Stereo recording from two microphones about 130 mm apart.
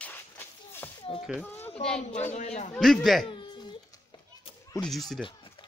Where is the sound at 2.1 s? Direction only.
65° left (ahead or behind).